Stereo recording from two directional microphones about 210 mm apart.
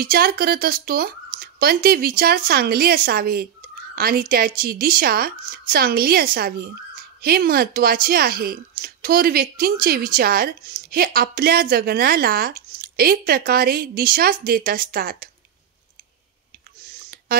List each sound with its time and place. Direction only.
0.0 s speech: 45° right (ahead or behind)